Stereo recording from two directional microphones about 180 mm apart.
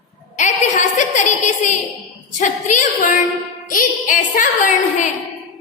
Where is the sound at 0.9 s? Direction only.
40° left (ahead or behind).